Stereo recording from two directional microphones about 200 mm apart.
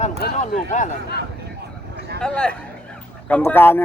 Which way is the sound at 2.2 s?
5° left (ahead or behind).